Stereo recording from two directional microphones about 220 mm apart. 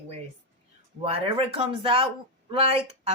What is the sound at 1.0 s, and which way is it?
Speech, 25° right (ahead or behind).